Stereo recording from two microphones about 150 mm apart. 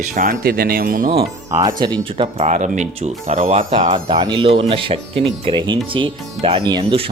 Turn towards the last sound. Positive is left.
turn(degrees=-30)  # may be behind; listen again after turning